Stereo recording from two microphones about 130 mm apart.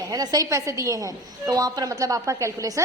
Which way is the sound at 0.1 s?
30° right (ahead or behind).